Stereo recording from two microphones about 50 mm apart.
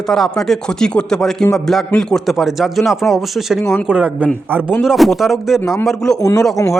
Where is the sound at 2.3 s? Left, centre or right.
Centre.